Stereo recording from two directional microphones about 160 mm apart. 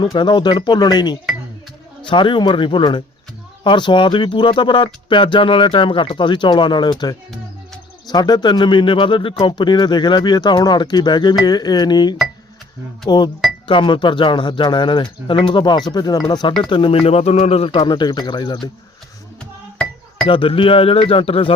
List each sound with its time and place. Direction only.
0.0 s speech: 30° left (ahead or behind)
7.3 s music: centre (ahead or behind)
8.1 s speech: 25° left (ahead or behind)
20.2 s speech: 35° left (ahead or behind)